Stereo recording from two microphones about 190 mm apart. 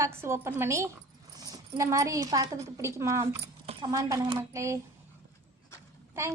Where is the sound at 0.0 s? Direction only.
15° right (ahead or behind).